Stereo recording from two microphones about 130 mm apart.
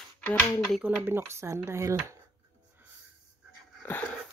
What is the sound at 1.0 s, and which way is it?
Speech, 20° right (ahead or behind).